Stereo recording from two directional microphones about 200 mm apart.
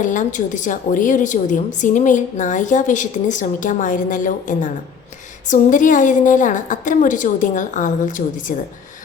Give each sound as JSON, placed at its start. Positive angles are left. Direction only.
{"t": 0.0, "sound": "a woman's voice", "side_deg": 40}